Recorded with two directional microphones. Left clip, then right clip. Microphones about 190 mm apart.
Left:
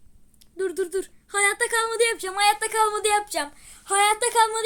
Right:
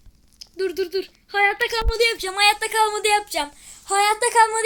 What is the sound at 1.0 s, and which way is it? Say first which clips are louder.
Speech: right 5 dB; 10° left (ahead or behind).